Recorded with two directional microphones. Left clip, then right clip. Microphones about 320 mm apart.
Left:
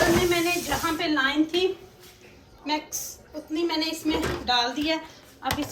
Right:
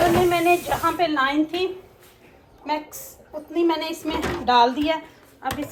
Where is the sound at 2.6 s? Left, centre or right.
Centre.